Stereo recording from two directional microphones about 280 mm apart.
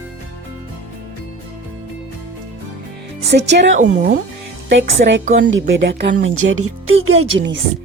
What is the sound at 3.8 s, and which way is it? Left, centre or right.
Music, right.